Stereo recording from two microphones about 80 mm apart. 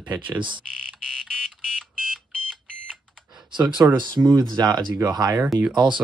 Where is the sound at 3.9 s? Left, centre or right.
Right.